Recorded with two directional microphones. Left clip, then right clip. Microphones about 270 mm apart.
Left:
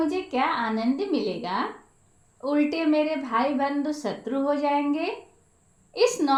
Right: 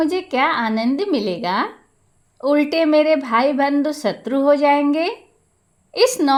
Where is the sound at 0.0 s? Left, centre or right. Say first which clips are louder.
Right 7 dB; right.